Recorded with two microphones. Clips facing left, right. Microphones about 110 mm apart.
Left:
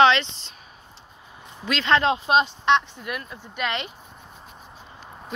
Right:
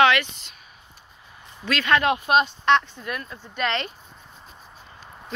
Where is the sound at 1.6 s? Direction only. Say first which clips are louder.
Even; 25° left (ahead or behind).